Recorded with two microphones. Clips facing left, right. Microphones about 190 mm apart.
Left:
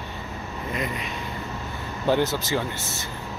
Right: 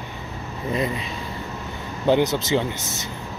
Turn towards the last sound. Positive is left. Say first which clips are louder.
# right 4 dB
turn(degrees=-20)  # may be behind; listen again after turning